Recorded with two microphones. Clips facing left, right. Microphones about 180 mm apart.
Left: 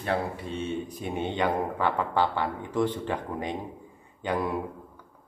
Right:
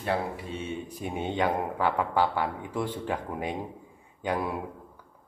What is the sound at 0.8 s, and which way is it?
Speech, 10° right (ahead or behind).